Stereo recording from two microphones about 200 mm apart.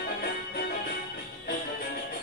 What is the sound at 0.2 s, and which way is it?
Music, 50° left (ahead or behind).